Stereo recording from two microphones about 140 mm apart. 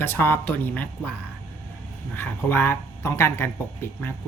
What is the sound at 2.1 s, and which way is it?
Speech, 15° left (ahead or behind).